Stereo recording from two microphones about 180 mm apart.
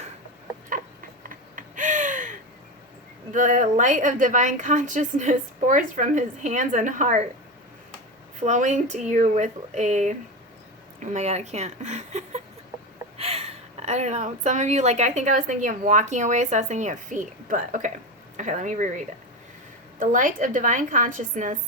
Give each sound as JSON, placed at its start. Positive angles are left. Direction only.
{"t": 1.2, "sound": "gasp", "side_deg": -50}
{"t": 3.3, "sound": "a woman's voice", "side_deg": -45}
{"t": 8.4, "sound": "a woman's voice", "side_deg": -40}